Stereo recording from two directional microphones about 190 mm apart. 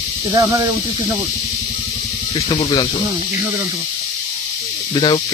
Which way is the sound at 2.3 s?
25° left (ahead or behind).